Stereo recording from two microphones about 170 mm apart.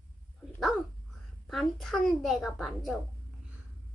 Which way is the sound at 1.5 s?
Centre (ahead or behind).